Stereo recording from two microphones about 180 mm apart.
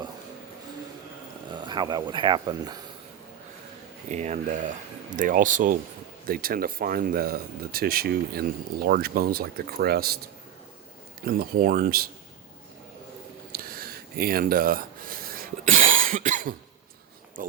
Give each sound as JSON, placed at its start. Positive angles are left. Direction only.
{"t": 1.5, "sound": "speech", "side_deg": -25}
{"t": 4.1, "sound": "speech", "side_deg": -40}
{"t": 11.3, "sound": "speech", "side_deg": -55}
{"t": 13.5, "sound": "a sound", "side_deg": -55}
{"t": 16.0, "sound": "cough", "side_deg": -45}